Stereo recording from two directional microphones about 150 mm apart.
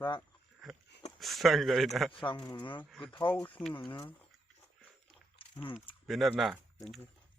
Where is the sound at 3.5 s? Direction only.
10° left (ahead or behind).